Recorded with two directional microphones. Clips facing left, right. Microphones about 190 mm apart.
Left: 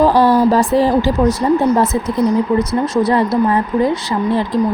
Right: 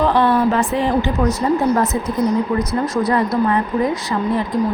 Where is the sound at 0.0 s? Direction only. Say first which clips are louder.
Left 4 dB; 35° left (ahead or behind).